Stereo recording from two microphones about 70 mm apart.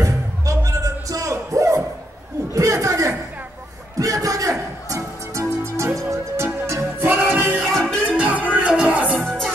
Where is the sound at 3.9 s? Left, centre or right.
Right.